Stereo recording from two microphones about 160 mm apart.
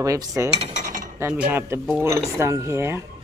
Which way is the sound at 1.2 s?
10° right (ahead or behind).